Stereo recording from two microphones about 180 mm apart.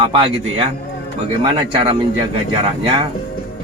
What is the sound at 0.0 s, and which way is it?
A man's voice, 30° right (ahead or behind).